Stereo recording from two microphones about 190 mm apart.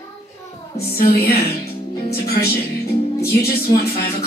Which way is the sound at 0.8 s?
55° left (ahead or behind).